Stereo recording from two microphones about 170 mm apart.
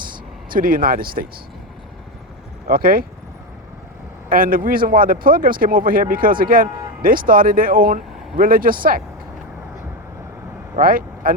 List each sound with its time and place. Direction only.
0.5 s speech: 55° right (ahead or behind)
2.6 s speech: 60° right (ahead or behind)
4.3 s speech: 55° right (ahead or behind)
10.8 s speech: 55° right (ahead or behind)